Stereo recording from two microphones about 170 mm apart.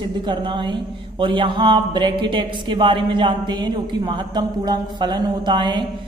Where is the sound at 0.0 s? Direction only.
25° right (ahead or behind).